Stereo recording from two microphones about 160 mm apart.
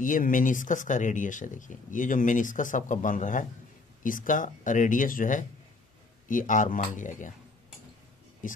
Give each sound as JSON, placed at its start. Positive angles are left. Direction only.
{"t": 0.0, "sound": "speech", "side_deg": 55}